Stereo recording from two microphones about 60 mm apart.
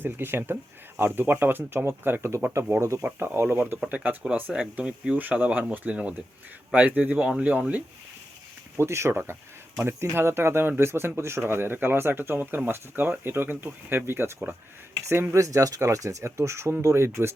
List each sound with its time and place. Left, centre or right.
0.0 s speech: right
3.0 s speech: right
3.8 s speech: right
4.5 s speech: centre
5.1 s speech: right
8.8 s speech: right
15.3 s speech: right